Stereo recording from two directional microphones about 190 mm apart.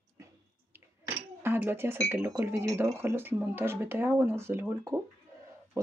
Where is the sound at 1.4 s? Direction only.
10° right (ahead or behind).